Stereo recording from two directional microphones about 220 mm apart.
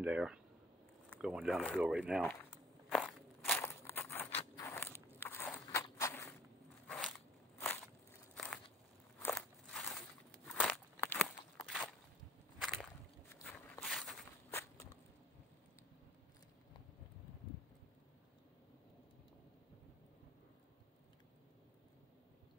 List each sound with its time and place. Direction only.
0.0 s speech: 5° right (ahead or behind)
1.2 s walk: 5° right (ahead or behind); by 6.3 s 15° left (ahead or behind)
6.9 s biting: centre (ahead or behind)
7.6 s a sound: 10° left (ahead or behind)
9.2 s walk: 5° left (ahead or behind)
13.3 s walk: 5° left (ahead or behind)
14.5 s walk: 10° left (ahead or behind)